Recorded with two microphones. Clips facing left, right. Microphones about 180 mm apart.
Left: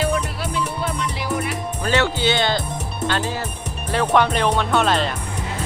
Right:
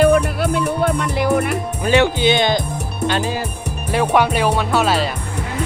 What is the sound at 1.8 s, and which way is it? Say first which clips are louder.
Music: right 5 dB; 15° right (ahead or behind).